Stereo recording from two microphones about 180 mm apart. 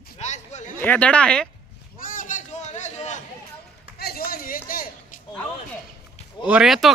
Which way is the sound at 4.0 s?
55° left (ahead or behind).